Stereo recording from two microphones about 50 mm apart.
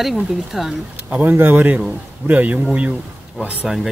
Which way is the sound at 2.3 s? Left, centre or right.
Right.